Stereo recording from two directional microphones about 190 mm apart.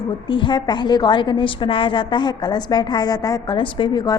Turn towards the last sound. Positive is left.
turn(degrees=20)  # may be behind; listen again after turning